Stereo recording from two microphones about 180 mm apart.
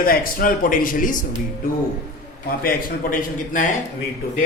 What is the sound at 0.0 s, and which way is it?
Speech, 55° left (ahead or behind).